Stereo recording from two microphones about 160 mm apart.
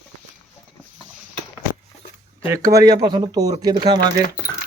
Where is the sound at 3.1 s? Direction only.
25° right (ahead or behind).